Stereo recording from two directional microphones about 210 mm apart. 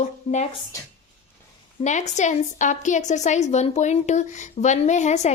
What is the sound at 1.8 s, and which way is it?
A woman's voice, 35° left (ahead or behind).